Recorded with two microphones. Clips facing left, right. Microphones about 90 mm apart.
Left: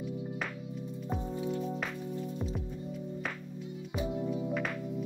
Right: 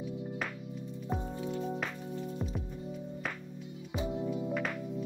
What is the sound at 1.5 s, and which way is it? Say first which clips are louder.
Music: even; 15° right (ahead or behind).